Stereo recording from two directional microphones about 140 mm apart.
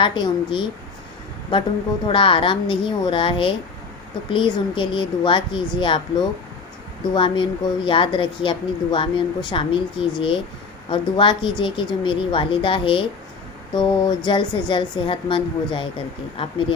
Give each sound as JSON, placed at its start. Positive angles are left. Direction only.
{"t": 0.0, "sound": "a woman's voice", "side_deg": 35}
{"t": 2.0, "sound": "a woman's voice", "side_deg": 40}